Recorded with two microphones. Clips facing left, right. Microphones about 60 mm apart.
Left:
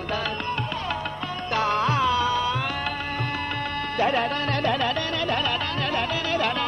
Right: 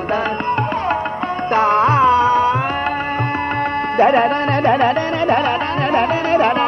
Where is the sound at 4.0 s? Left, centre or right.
Right.